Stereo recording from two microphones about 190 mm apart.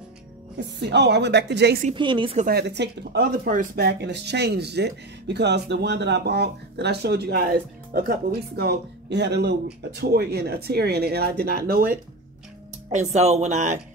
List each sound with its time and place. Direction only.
0.6 s speech: 65° right (ahead or behind)
2.0 s a woman's voice: 25° right (ahead or behind)
2.3 s speech: 50° right (ahead or behind)
3.4 s speech: 50° right (ahead or behind)
12.9 s speech: 35° right (ahead or behind)